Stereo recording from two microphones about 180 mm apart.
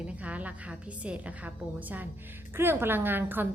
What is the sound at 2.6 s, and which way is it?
Speech, 15° right (ahead or behind).